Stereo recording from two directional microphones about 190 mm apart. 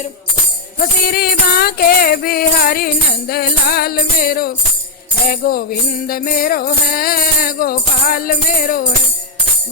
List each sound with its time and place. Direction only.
1.0 s music: 50° left (ahead or behind)